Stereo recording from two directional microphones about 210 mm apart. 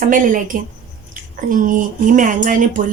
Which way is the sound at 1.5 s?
40° right (ahead or behind).